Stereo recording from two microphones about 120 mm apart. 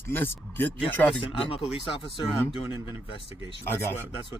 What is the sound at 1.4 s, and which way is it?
Speech, 50° left (ahead or behind).